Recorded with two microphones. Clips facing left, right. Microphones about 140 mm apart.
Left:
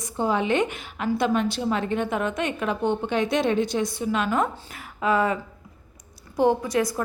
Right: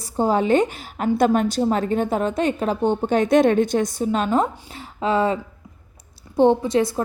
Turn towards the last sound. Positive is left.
turn(degrees=-25)  # may be behind; listen again after turning